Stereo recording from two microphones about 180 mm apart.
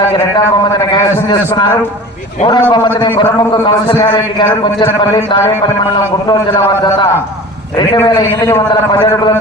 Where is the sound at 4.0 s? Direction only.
15° left (ahead or behind).